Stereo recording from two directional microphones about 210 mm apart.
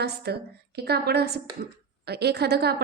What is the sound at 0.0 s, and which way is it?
A woman's voice, 50° right (ahead or behind).